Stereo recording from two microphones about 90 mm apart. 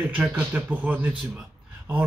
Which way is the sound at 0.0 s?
20° right (ahead or behind).